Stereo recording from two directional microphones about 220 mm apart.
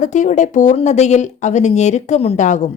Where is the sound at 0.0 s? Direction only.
35° left (ahead or behind).